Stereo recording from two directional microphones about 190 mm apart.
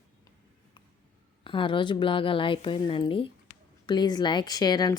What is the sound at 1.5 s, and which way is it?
A woman's voice, 25° left (ahead or behind).